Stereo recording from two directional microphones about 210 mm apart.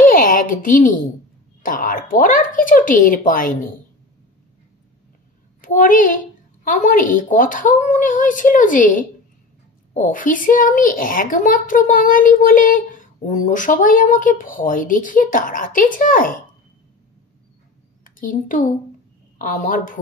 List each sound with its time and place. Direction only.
0.0 s a sound: 40° left (ahead or behind)
1.6 s a woman's voice: 40° left (ahead or behind)
5.6 s a woman's voice: 40° left (ahead or behind)
18.0 s a child's voice: 40° left (ahead or behind)